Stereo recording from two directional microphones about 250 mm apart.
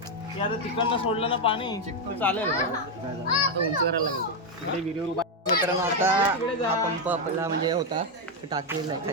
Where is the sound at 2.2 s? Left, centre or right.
Centre.